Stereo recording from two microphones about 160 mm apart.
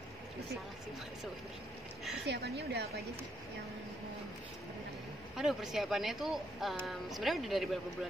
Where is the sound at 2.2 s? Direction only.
90° right.